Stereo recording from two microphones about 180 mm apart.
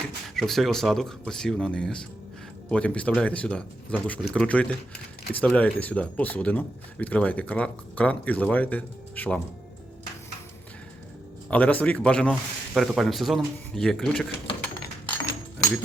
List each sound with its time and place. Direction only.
0.3 s speech: centre (ahead or behind)
11.5 s speech: 10° left (ahead or behind)